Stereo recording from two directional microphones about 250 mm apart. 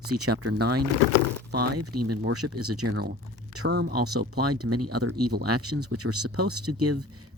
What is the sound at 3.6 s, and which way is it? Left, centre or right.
Speech, right.